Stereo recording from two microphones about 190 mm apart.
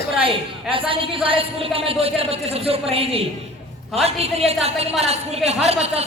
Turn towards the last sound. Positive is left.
turn(degrees=-35)  # may be behind; listen again after turning